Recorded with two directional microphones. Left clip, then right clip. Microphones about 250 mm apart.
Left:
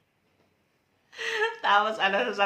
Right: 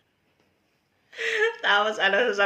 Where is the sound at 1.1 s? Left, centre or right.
Centre.